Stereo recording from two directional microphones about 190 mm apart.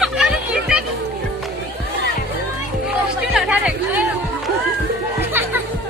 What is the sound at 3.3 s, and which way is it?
Chatter, 5° right (ahead or behind).